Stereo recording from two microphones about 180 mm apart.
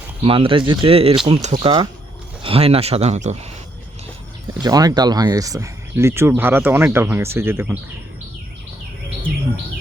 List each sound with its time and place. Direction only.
0.2 s speech: 30° right (ahead or behind)
4.6 s speech: 20° right (ahead or behind)